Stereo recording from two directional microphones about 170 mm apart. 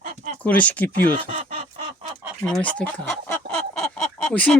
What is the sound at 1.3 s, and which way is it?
Speech, 35° right (ahead or behind).